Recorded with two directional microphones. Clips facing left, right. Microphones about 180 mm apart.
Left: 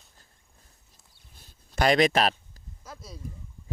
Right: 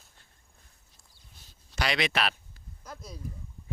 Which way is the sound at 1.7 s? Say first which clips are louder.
Left 8 dB; 45° left (ahead or behind).